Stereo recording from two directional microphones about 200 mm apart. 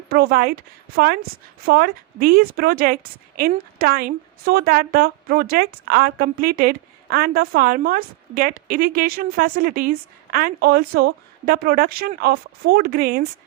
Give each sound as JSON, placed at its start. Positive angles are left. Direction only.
{"t": 0.1, "sound": "a woman's voice", "side_deg": -50}